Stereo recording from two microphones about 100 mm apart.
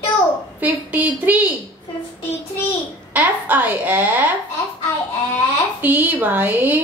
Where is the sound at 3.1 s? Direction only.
20° right (ahead or behind).